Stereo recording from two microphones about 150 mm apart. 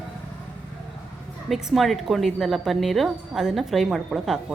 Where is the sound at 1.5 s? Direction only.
Centre (ahead or behind).